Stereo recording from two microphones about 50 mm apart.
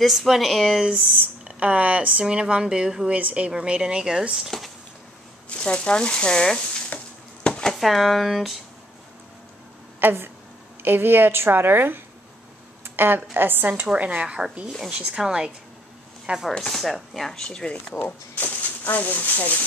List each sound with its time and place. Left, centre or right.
0.0 s speech: centre
1.6 s a woman's voice: right
2.2 s speech: centre
3.1 s a woman's voice: right
4.3 s speech: centre
5.5 s speech: left
7.4 s a sound: centre
7.7 s speech: centre
9.9 s a woman's voice: right
13.8 s a woman's voice: right
16.5 s speech: centre
18.3 s speech: left